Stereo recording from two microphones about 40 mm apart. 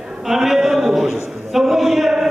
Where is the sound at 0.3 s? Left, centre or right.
Centre.